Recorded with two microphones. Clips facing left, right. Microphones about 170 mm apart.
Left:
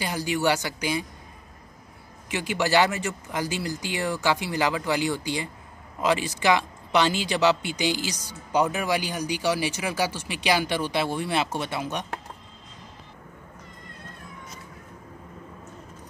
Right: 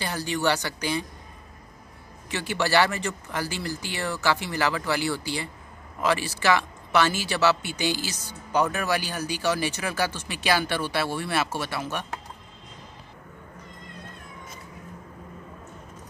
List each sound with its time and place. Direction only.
0.0 s speech: 10° left (ahead or behind)
2.2 s speech: 15° left (ahead or behind)